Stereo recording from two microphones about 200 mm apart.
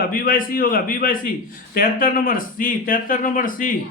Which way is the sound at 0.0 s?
45° left (ahead or behind).